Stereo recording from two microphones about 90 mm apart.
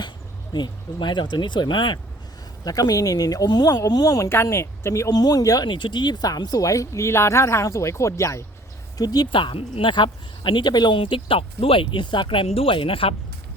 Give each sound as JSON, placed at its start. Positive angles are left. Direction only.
{"t": 0.5, "sound": "speech", "side_deg": 55}
{"t": 2.6, "sound": "speech", "side_deg": 45}
{"t": 4.3, "sound": "speech", "side_deg": 30}
{"t": 5.1, "sound": "speech", "side_deg": 45}
{"t": 5.6, "sound": "speech", "side_deg": 60}
{"t": 9.0, "sound": "speech", "side_deg": 45}
{"t": 9.3, "sound": "speech", "side_deg": 70}
{"t": 10.9, "sound": "speech", "side_deg": 80}